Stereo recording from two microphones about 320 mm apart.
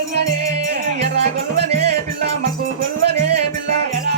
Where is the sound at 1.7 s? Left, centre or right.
Centre.